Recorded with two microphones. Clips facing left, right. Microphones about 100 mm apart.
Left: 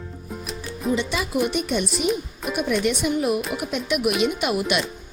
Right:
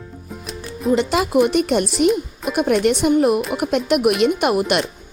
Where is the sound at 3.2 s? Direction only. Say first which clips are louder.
Right 6 dB; 60° right (ahead or behind).